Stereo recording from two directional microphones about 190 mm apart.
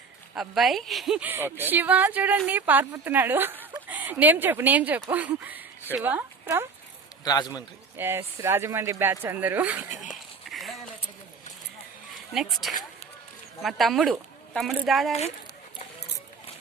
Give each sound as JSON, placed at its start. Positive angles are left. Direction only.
{"t": 0.3, "sound": "a woman's voice", "side_deg": 0}
{"t": 7.3, "sound": "a man's voice", "side_deg": 20}
{"t": 7.9, "sound": "a woman's voice", "side_deg": -10}
{"t": 10.1, "sound": "a sound", "side_deg": 0}
{"t": 12.3, "sound": "speech", "side_deg": 0}